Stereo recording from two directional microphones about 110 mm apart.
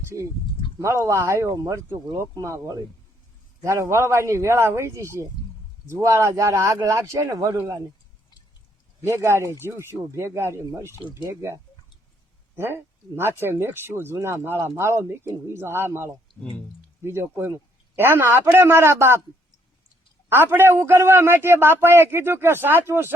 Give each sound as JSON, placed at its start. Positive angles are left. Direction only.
{"t": 0.8, "sound": "speech", "side_deg": -25}
{"t": 7.5, "sound": "speech", "side_deg": -20}
{"t": 9.0, "sound": "speech", "side_deg": -25}
{"t": 20.3, "sound": "speech", "side_deg": -20}